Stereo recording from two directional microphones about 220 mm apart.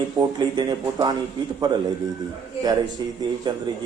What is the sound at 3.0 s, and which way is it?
Speech, 20° right (ahead or behind).